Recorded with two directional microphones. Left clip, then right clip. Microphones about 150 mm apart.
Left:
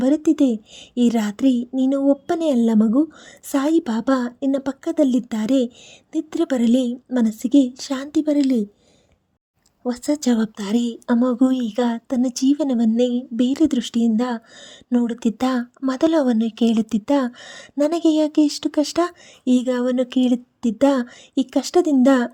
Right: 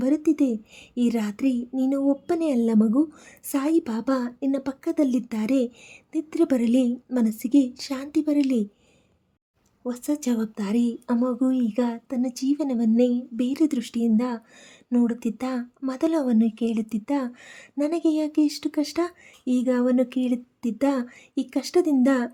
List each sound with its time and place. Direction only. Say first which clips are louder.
0.0 s a woman's voice: left 5 dB; 35° left (ahead or behind)
9.8 s a woman's voice: left 6 dB; 35° left (ahead or behind)